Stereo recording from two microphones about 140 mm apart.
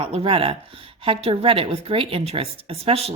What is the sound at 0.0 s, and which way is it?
Speech, 40° right (ahead or behind).